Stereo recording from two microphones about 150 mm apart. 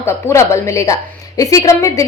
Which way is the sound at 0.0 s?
20° left (ahead or behind).